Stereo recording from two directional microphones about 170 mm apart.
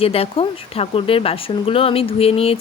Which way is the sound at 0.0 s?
35° left (ahead or behind).